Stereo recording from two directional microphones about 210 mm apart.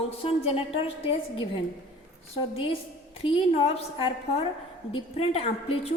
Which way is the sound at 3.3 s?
25° left (ahead or behind).